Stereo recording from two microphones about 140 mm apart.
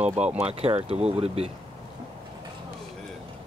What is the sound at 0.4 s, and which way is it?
Speech, 45° right (ahead or behind).